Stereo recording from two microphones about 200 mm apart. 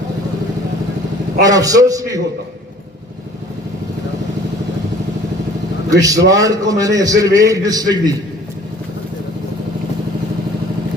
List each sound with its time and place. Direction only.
1.4 s a man's voice: 15° right (ahead or behind)
5.9 s a man's voice: 15° right (ahead or behind)